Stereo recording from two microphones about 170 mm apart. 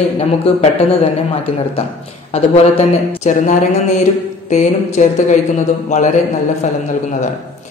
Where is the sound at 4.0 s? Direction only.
45° left (ahead or behind).